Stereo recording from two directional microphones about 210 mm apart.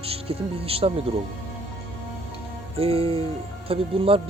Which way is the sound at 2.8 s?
25° right (ahead or behind).